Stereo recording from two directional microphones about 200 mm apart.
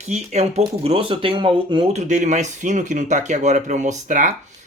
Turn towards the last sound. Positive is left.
turn(degrees=-40)  # may be behind; listen again after turning